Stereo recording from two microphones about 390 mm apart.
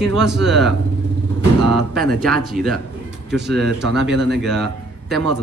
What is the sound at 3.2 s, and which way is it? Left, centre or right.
Speech, right.